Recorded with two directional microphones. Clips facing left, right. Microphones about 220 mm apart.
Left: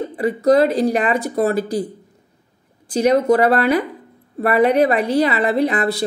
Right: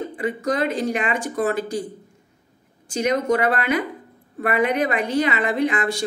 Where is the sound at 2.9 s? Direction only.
35° left (ahead or behind).